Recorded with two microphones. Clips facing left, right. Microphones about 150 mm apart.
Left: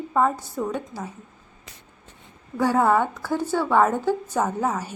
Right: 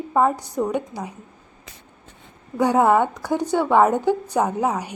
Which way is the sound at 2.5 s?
15° right (ahead or behind).